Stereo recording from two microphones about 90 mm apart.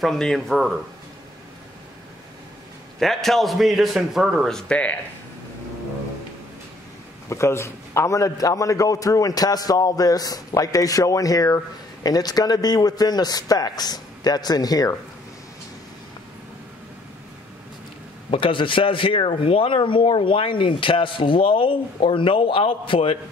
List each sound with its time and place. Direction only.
0.0 s a man's voice: 5° left (ahead or behind)
3.0 s a man's voice: 5° left (ahead or behind)
4.5 s speech: 10° left (ahead or behind)
7.2 s a man's voice: 30° left (ahead or behind)
18.3 s speech: 70° left (ahead or behind)